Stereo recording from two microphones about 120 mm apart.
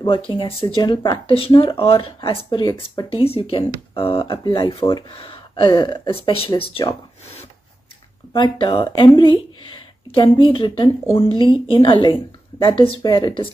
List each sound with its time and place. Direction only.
0.0 s speech: 45° left (ahead or behind)
0.8 s speech: 35° left (ahead or behind)
1.2 s speech: 50° left (ahead or behind)
8.4 s speech: 45° left (ahead or behind)
13.0 s speech: 35° left (ahead or behind)